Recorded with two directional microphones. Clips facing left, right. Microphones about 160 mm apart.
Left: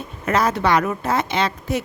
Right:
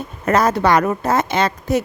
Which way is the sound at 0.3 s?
40° right (ahead or behind).